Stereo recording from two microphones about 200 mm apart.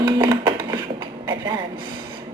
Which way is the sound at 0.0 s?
20° right (ahead or behind).